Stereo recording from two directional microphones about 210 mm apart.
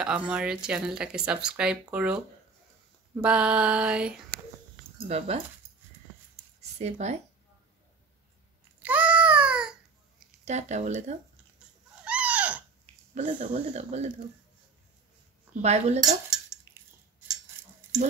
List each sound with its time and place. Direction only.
0.0 s speech: 5° right (ahead or behind)
5.0 s speech: 30° right (ahead or behind)
6.8 s speech: 30° right (ahead or behind)
8.8 s baby cry: 5° right (ahead or behind)
10.4 s speech: 35° right (ahead or behind)
12.0 s a sound: 5° right (ahead or behind)
12.8 s speech: 35° right (ahead or behind)
15.6 s speech: 30° right (ahead or behind)